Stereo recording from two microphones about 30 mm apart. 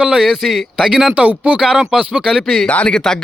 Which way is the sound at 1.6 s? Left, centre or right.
Centre.